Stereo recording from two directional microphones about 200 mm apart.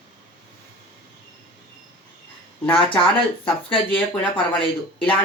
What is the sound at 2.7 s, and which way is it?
Speech, 5° left (ahead or behind).